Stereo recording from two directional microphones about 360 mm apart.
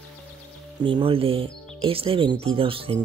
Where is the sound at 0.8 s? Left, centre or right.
Centre.